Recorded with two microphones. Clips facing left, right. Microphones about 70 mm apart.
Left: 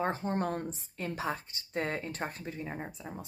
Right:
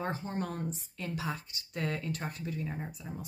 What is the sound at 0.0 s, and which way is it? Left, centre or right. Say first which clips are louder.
Speech: left 4 dB; left.